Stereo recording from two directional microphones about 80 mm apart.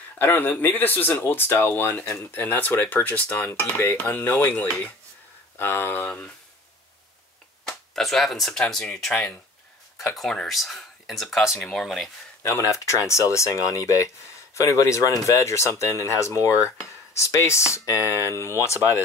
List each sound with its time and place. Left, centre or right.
0.2 s speech: left
7.6 s speech: centre
12.4 s speech: left